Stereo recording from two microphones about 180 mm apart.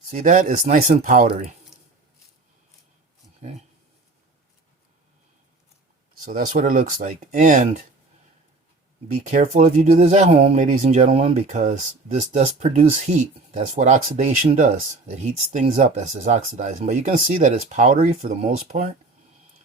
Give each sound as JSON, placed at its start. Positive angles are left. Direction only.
{"t": 0.1, "sound": "speech", "side_deg": -45}
{"t": 6.2, "sound": "speech", "side_deg": -45}
{"t": 9.6, "sound": "speech", "side_deg": -45}
{"t": 10.0, "sound": "speech", "side_deg": -35}